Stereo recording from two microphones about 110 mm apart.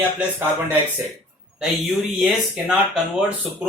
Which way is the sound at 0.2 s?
20° right (ahead or behind).